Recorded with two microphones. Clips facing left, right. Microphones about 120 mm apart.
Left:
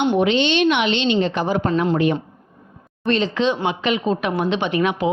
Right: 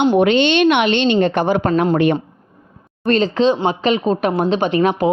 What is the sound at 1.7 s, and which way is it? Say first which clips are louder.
Speech: right 3 dB; 50° right (ahead or behind).